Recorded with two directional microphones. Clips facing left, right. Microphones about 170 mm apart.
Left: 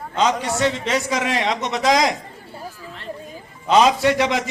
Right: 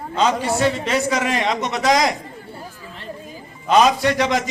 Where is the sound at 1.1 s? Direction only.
Centre (ahead or behind).